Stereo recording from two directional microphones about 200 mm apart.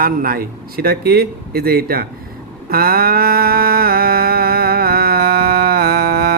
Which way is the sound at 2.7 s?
50° right (ahead or behind).